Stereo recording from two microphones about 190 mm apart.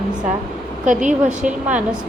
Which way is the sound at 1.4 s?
5° right (ahead or behind).